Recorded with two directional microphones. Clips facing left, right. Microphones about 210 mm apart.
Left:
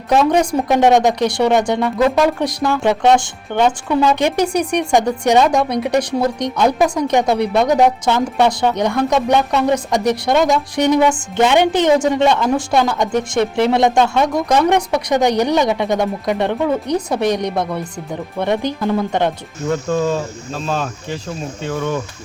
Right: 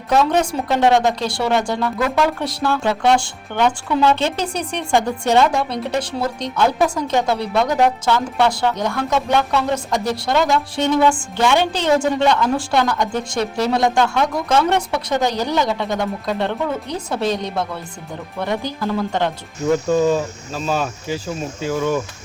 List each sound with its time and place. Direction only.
0.1 s a woman's voice: 15° left (ahead or behind)
19.7 s speech: 5° right (ahead or behind)